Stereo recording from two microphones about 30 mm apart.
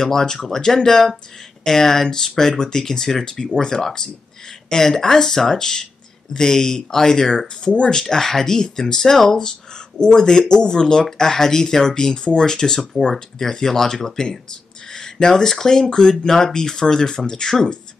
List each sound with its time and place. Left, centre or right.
0.0 s speech: centre
2.9 s speech: centre
7.3 s speech: left
7.9 s speech: centre
15.0 s a sound: left
15.6 s speech: left